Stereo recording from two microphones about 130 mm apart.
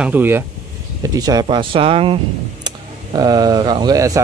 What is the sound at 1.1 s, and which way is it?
Speech, 30° right (ahead or behind).